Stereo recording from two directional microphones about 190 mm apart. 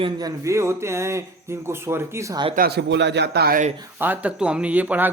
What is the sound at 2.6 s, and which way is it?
A man's voice, 60° right (ahead or behind).